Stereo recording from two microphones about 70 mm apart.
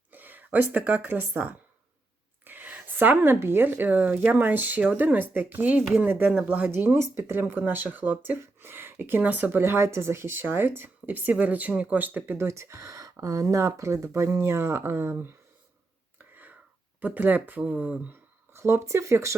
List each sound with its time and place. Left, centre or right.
0.1 s speech: right
6.7 s speech: right
7.0 s a woman's voice: right
7.3 s a woman's voice: right
12.4 s speech: right
17.0 s speech: right
18.1 s speech: right